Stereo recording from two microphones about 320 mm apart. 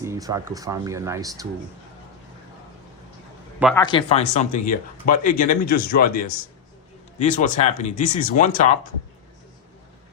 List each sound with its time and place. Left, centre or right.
0.0 s speech: centre
3.8 s speech: centre